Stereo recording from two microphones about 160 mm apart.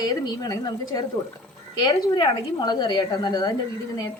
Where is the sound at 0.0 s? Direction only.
25° left (ahead or behind).